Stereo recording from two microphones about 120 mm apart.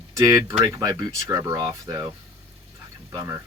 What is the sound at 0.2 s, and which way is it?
Speech, 30° right (ahead or behind).